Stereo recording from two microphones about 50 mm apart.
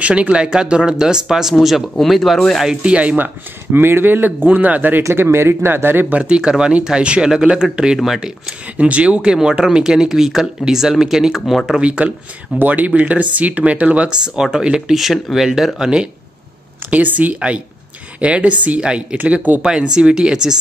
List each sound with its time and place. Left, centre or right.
0.0 s speech: right; by 2.6 s centre
2.8 s speech: right
3.7 s speech: right
5.1 s speech: right
6.1 s speech: right
8.7 s speech: right; by 11.8 s centre
11.8 s speech: right
12.5 s speech: right; by 16.0 s centre
16.9 s speech: right
19.2 s speech: right
19.6 s speech: centre